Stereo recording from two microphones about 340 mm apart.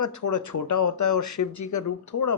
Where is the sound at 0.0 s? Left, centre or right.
Left.